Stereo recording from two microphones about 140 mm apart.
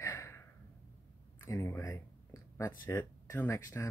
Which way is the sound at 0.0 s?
20° left (ahead or behind).